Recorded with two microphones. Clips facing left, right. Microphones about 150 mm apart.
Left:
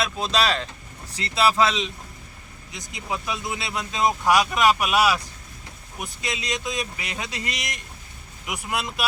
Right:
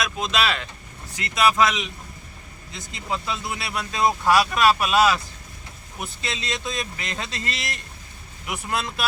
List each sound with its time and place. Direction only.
0.0 s speech: 35° left (ahead or behind)
2.9 s speech: 15° left (ahead or behind)